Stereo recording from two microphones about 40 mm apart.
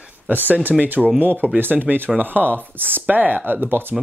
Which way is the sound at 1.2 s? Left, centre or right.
Right.